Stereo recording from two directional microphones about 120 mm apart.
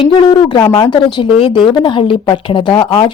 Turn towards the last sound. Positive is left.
turn(degrees=40)  # may be behind; listen again after turning